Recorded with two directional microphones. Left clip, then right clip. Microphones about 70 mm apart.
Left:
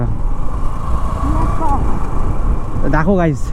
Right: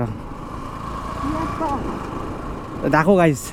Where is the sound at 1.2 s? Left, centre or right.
Centre.